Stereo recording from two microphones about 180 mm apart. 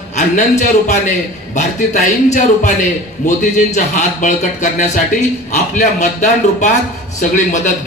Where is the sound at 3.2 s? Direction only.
45° left (ahead or behind).